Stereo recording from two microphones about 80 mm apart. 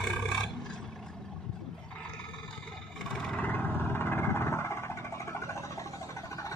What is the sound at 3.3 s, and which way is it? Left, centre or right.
Vehicle, centre.